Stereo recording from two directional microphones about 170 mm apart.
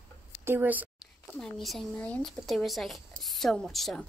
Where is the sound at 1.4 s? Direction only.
Centre (ahead or behind).